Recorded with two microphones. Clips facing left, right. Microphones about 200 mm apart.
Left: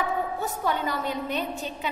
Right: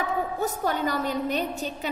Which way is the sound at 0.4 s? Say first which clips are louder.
Right 2 dB; 40° right (ahead or behind).